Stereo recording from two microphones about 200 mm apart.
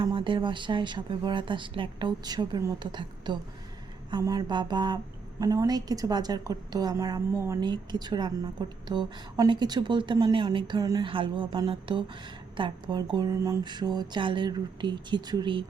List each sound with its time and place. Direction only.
0.0 s a woman's voice: 25° right (ahead or behind)